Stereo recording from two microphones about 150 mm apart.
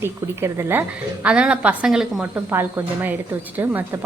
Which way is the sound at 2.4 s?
15° right (ahead or behind).